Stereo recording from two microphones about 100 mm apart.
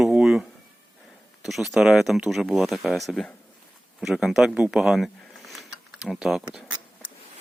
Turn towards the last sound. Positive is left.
turn(degrees=-5)  # may be behind; listen again after turning